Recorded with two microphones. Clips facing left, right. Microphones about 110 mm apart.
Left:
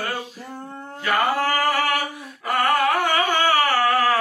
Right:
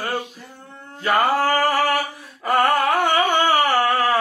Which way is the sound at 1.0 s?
35° right (ahead or behind).